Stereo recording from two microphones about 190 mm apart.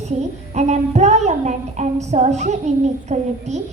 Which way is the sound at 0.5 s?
35° right (ahead or behind).